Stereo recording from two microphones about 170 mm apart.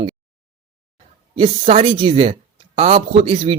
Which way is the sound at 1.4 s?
35° right (ahead or behind).